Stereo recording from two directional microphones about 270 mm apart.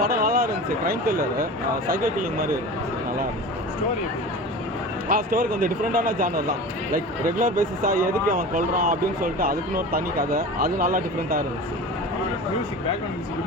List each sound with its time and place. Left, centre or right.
0.0 s a sound: right
1.9 s speech: right
5.0 s speech: right